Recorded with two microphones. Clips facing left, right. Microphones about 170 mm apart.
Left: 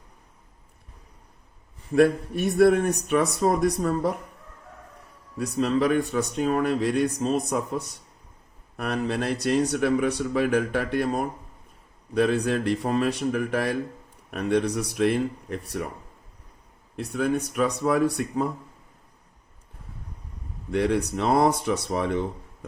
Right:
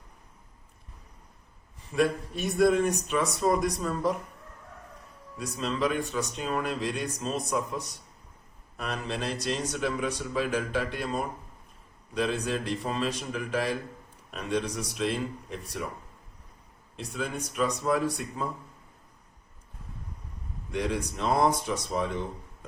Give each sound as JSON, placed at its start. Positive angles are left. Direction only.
{"t": 1.9, "sound": "a man's voice", "side_deg": 55}
{"t": 5.4, "sound": "a man's voice", "side_deg": 55}
{"t": 17.0, "sound": "a man's voice", "side_deg": 60}
{"t": 20.7, "sound": "a man's voice", "side_deg": 60}